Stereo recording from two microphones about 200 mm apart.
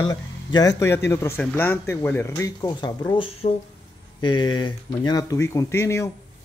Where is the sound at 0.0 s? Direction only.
20° left (ahead or behind).